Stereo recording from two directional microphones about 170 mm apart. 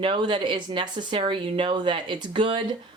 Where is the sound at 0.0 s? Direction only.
30° right (ahead or behind).